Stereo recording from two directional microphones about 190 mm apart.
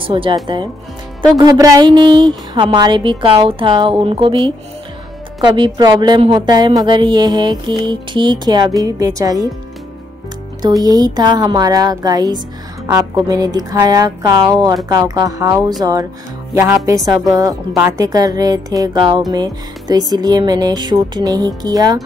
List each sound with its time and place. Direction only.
0.0 s a woman's voice: 25° right (ahead or behind)
5.4 s a woman's voice: 25° right (ahead or behind)
10.6 s a woman's voice: 20° right (ahead or behind)